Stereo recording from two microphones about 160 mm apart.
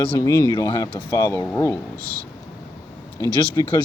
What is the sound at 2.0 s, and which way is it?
Speech, 65° right (ahead or behind).